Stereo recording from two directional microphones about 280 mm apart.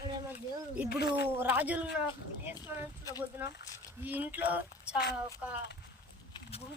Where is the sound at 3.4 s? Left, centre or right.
Centre.